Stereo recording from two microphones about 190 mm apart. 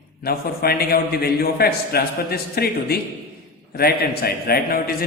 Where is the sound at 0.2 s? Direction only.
55° left (ahead or behind).